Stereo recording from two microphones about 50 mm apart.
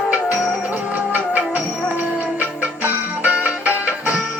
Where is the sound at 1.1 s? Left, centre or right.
Right.